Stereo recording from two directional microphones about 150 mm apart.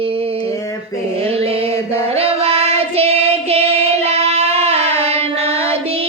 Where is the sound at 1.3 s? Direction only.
40° right (ahead or behind).